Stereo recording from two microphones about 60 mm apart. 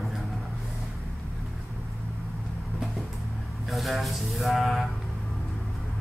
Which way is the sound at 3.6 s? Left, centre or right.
Centre.